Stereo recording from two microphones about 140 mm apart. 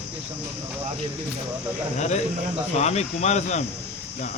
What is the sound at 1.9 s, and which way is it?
Speech, 55° left (ahead or behind).